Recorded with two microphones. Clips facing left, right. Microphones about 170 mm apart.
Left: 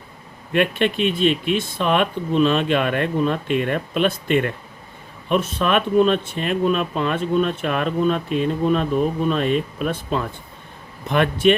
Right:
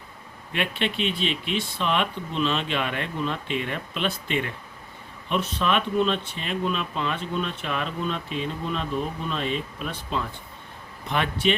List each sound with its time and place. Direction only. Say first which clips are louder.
0.5 s speech: left 8 dB; 50° left (ahead or behind)